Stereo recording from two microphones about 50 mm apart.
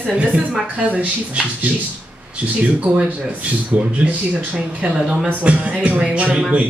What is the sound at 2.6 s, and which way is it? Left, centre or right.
Speech, right.